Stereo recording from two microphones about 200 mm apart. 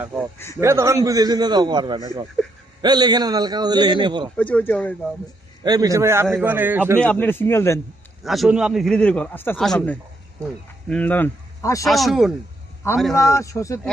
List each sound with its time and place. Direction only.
0.0 s a man's voice: 10° right (ahead or behind)
4.4 s a man's voice: 5° left (ahead or behind)
5.6 s speech: 20° right (ahead or behind)
7.0 s a man's voice: 10° left (ahead or behind)
8.2 s a man's voice: centre (ahead or behind); by 11.9 s 15° left (ahead or behind)
11.9 s a man's voice: centre (ahead or behind)
13.1 s a man's voice: 15° left (ahead or behind)